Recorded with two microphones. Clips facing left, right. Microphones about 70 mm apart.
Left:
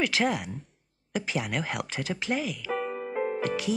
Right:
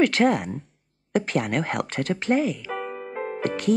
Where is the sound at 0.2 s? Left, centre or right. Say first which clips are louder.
Right 6 dB; centre.